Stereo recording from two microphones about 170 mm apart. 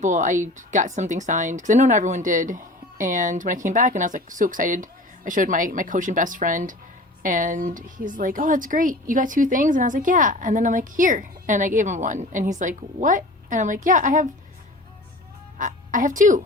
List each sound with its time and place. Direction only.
0.0 s speech: 45° right (ahead or behind)
15.5 s a woman's voice: 50° right (ahead or behind)